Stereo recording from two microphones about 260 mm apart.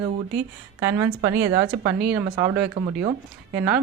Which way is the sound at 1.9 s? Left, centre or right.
Right.